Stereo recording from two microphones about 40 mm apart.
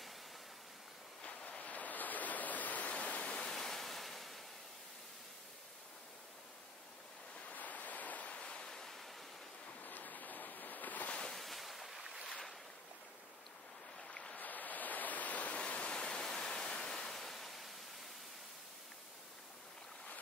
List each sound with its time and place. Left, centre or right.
1.2 s a sound: left
1.7 s a sound: left
3.0 s waterfall: left
3.4 s waves: centre
7.3 s waves: left
8.5 s waves: centre
9.8 s a sound: left
11.1 s ocean: centre
11.4 s waves: centre
12.0 s boat: centre
14.3 s a sound: left
15.9 s waves: centre